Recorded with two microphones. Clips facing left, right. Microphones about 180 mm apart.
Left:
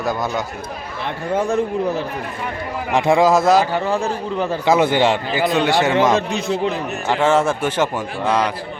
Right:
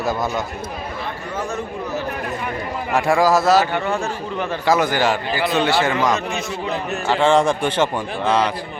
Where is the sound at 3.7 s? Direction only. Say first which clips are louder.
Left 2 dB; 35° left (ahead or behind).